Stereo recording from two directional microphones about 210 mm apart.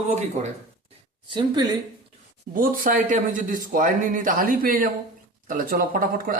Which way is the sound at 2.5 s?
40° right (ahead or behind).